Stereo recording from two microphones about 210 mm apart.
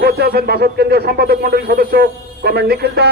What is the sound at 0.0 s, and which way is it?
A man's voice, 50° right (ahead or behind).